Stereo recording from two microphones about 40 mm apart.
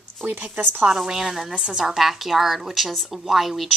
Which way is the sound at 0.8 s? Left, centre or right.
Centre.